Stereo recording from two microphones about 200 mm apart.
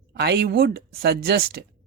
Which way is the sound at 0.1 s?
55° right (ahead or behind).